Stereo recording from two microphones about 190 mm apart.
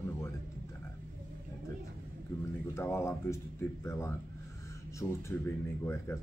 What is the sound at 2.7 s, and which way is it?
Speech, 15° left (ahead or behind).